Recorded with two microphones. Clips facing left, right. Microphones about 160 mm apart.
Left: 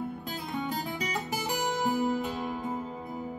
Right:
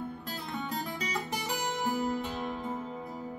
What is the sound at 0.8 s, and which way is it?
Music, 10° left (ahead or behind).